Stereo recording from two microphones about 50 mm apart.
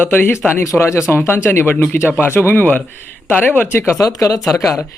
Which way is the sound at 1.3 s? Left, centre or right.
Left.